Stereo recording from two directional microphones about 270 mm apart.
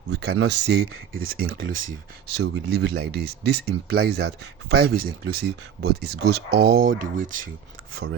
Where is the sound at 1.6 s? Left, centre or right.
Right.